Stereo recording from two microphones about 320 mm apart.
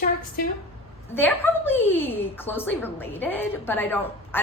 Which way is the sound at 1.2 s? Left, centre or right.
Centre.